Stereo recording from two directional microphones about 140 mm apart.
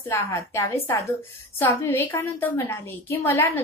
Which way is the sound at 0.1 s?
20° left (ahead or behind).